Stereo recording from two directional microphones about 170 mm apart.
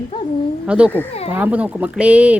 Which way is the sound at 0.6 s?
5° right (ahead or behind).